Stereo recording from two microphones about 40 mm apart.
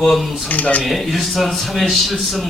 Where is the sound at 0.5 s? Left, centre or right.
Left.